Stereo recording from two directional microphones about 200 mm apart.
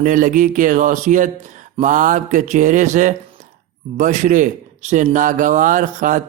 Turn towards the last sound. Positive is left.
turn(degrees=-40)  # may be behind; listen again after turning